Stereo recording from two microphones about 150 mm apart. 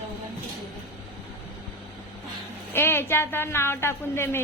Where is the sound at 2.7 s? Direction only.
15° left (ahead or behind).